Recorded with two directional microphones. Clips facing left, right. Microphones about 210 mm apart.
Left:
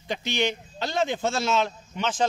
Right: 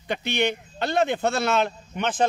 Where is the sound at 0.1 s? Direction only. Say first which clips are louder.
Right 2 dB; 60° right (ahead or behind).